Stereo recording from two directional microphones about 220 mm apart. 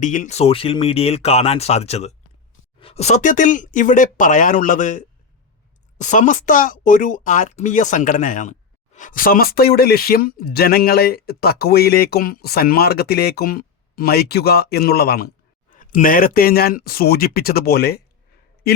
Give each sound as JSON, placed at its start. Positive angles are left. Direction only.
{"t": 0.0, "sound": "speech", "side_deg": 35}